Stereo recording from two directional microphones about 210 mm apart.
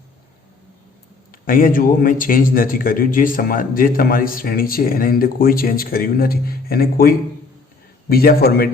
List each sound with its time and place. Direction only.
1.3 s a man's voice: 40° left (ahead or behind)